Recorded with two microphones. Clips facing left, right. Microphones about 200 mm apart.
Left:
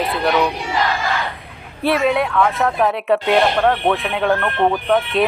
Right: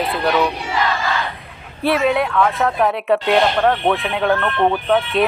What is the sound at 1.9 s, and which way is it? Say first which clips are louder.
Speech: even; centre (ahead or behind).